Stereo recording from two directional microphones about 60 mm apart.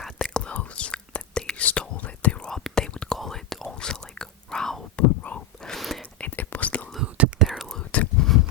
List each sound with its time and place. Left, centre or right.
0.0 s whispering: centre
4.9 s whispering: left
5.6 s whispering: centre
6.1 s whispering: left
7.0 s whispering: right
7.8 s whispering: centre